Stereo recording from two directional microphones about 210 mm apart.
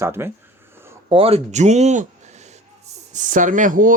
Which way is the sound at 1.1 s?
25° right (ahead or behind).